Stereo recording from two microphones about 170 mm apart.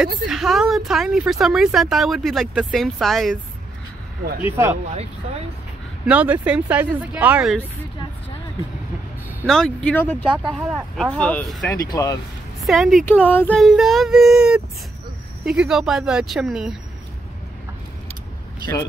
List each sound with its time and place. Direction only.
0.0 s speech: centre (ahead or behind)
4.5 s speech: 15° right (ahead or behind)
6.0 s speech: 10° right (ahead or behind)
9.5 s speech: 5° left (ahead or behind)
11.7 s speech: 20° left (ahead or behind)
12.6 s speech: centre (ahead or behind)
13.0 s speech: 10° left (ahead or behind)